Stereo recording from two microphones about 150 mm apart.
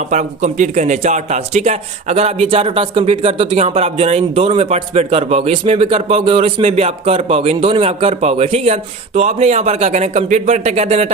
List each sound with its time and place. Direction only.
0.0 s speech: 55° right (ahead or behind)